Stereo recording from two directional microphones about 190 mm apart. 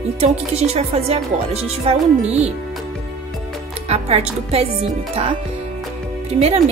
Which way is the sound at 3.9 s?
35° right (ahead or behind).